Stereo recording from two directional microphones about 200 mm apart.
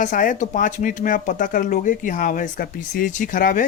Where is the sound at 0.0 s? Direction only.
40° left (ahead or behind).